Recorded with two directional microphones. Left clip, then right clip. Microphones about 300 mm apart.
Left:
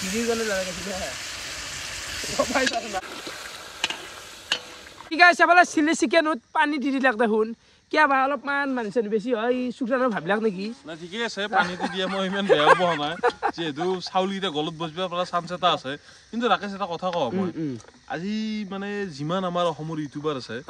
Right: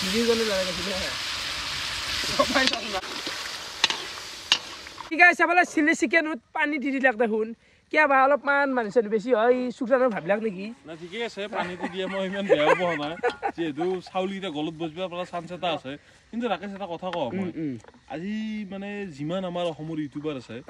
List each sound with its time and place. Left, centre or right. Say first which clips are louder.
0.0 s speech: right 2 dB; centre
5.1 s a man's voice: left 3 dB; centre
9.6 s speech: even; right
9.8 s a man's voice: right 1 dB; centre
11.1 s a man's voice: left 6 dB; centre